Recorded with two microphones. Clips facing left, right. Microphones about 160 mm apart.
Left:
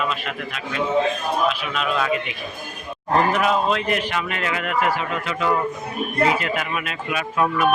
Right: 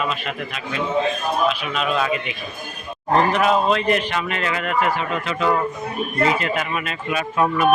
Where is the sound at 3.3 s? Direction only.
Centre (ahead or behind).